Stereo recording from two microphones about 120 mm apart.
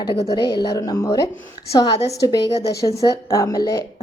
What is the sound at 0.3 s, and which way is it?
A woman's voice, 35° left (ahead or behind).